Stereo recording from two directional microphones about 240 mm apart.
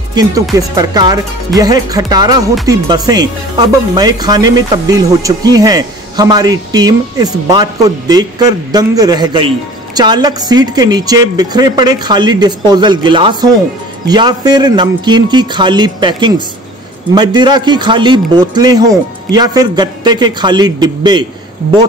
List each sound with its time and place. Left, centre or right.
0.1 s a man's voice: centre